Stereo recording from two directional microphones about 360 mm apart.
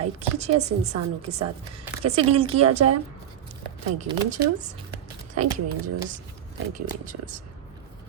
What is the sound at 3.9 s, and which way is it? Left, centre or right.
Speech, centre.